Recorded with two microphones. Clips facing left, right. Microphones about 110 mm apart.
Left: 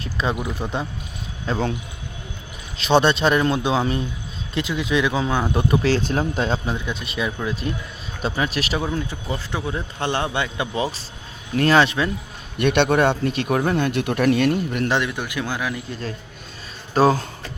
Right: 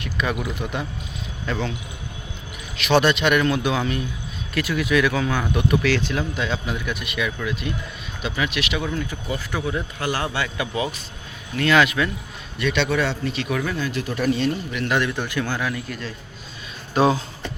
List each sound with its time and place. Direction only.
0.0 s speech: 30° left (ahead or behind)
2.7 s speech: 30° left (ahead or behind)
6.7 s speech: 25° left (ahead or behind)
8.9 s speech: 25° left (ahead or behind)
12.5 s speech: 55° left (ahead or behind)
13.7 s speech: 60° left (ahead or behind)
15.0 s speech: 15° left (ahead or behind)
16.9 s speech: 40° left (ahead or behind)